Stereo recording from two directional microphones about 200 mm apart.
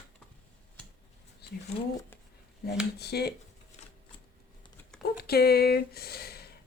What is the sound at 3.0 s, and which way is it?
Speech, 55° left (ahead or behind).